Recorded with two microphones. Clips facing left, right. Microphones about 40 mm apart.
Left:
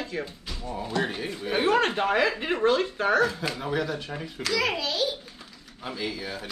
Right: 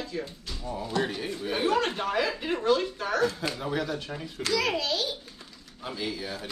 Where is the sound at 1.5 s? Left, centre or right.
Left.